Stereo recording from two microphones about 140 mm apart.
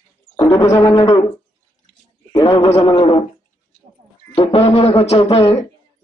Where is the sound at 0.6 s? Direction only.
20° left (ahead or behind).